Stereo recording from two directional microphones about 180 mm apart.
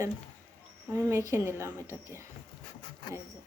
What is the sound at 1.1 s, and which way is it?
Speech, 15° right (ahead or behind).